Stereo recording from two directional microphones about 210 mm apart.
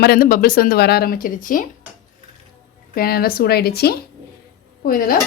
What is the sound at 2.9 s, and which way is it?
Speech, 45° left (ahead or behind).